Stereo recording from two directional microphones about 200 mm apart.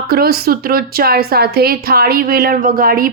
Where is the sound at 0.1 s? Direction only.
50° right (ahead or behind).